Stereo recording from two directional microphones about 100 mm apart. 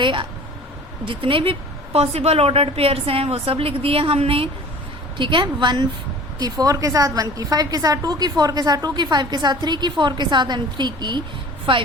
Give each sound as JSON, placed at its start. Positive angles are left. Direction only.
{"t": 0.0, "sound": "a woman's voice", "side_deg": -55}
{"t": 5.1, "sound": "a woman's voice", "side_deg": -55}